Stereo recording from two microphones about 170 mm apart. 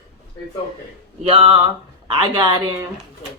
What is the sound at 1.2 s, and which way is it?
A woman's voice, 35° right (ahead or behind).